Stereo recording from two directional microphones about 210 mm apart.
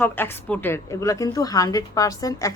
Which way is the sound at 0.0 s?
10° left (ahead or behind).